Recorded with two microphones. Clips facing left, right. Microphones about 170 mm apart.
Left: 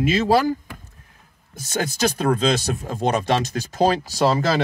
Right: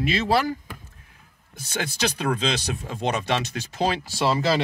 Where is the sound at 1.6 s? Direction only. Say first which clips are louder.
Left 5 dB; 45° left (ahead or behind).